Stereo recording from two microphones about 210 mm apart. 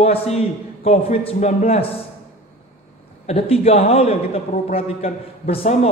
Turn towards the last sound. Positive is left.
turn(degrees=30)  # may be behind; listen again after turning